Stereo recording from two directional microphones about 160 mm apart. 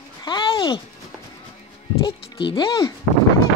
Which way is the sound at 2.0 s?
35° left (ahead or behind).